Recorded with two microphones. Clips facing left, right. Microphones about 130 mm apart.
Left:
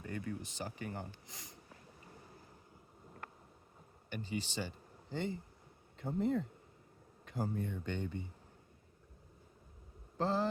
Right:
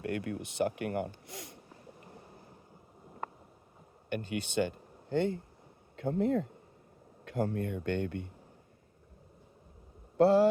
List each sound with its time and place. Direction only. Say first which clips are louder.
0.0 s speech: right 7 dB; 70° right (ahead or behind)
4.1 s speech: right 7 dB; 60° right (ahead or behind)
6.0 s speech: right 5 dB; 75° right (ahead or behind)
10.2 s speech: right 11 dB; 70° right (ahead or behind)